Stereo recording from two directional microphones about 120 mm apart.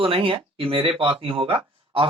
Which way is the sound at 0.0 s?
45° right (ahead or behind).